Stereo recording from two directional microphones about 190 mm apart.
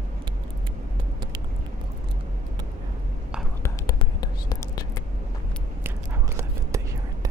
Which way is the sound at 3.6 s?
20° left (ahead or behind).